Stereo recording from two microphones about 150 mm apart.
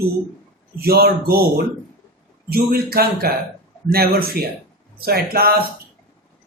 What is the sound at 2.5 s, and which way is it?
Speech, 90° right.